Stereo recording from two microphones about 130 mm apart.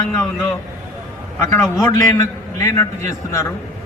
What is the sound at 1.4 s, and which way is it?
A man's voice, 20° left (ahead or behind).